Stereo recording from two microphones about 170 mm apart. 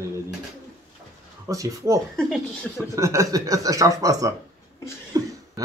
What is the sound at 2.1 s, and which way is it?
Speech, centre (ahead or behind).